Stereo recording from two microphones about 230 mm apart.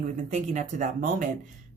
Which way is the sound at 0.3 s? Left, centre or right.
Right.